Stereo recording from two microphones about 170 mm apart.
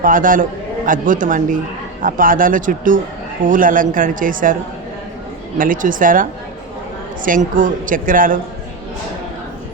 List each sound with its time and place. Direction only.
0.0 s speech: 55° right (ahead or behind)
5.5 s speech: 55° right (ahead or behind)
7.3 s speech: 50° right (ahead or behind)